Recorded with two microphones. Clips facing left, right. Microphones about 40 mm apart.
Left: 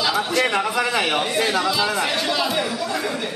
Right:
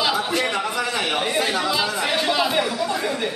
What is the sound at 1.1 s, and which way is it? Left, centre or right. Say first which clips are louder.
Speech: left 1 dB; centre.